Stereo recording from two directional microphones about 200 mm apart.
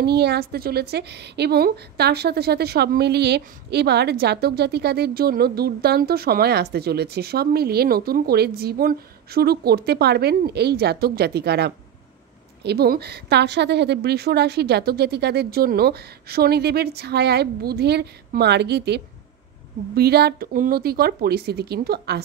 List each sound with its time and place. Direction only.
0.0 s a woman's voice: 55° right (ahead or behind)